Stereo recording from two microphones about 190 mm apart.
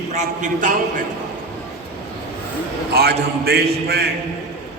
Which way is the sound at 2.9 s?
55° right (ahead or behind).